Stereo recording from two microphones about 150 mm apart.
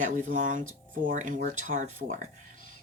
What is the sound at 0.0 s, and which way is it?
Speech, 55° right (ahead or behind).